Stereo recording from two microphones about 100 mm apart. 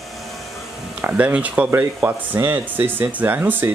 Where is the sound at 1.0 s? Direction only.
15° right (ahead or behind).